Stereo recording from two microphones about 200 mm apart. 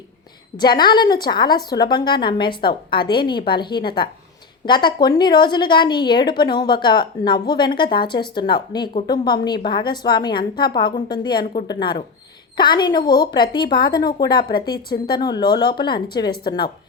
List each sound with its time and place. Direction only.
0.5 s a woman's voice: 20° left (ahead or behind)
14.8 s speech: 50° left (ahead or behind)
15.2 s a woman's voice: 20° left (ahead or behind)